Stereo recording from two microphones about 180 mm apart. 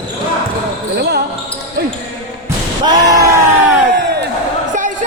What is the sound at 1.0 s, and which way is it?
Speech, 60° right (ahead or behind).